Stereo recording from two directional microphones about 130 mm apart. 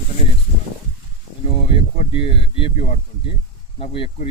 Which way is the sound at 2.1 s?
45° left (ahead or behind).